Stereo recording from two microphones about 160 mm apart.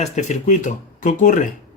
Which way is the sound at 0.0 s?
50° left (ahead or behind).